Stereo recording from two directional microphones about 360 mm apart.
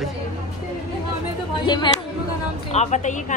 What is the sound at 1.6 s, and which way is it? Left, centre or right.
A woman's voice, centre.